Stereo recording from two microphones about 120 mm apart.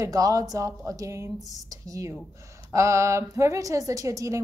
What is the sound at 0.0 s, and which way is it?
A woman's voice, 30° right (ahead or behind).